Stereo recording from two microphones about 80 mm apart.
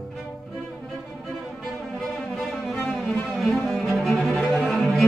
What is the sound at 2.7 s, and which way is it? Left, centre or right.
Music, centre.